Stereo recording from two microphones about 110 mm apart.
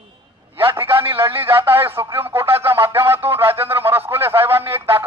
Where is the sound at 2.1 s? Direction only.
20° right (ahead or behind).